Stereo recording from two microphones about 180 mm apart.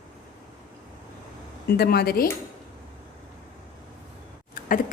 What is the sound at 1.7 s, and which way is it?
Speech, 60° left (ahead or behind).